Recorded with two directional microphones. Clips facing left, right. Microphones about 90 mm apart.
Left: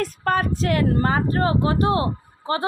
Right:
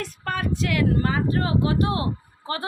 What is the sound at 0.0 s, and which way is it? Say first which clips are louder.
A woman's voice: left 6 dB; 40° left (ahead or behind).